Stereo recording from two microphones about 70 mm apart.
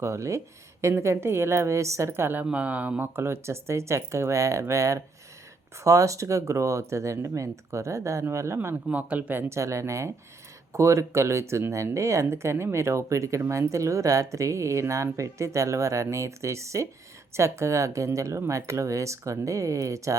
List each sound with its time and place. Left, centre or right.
0.0 s speech: right
2.4 s speech: centre
3.2 s speech: right
8.9 s speech: right
9.5 s speech: right